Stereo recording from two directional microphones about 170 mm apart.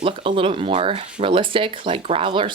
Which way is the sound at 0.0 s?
30° right (ahead or behind).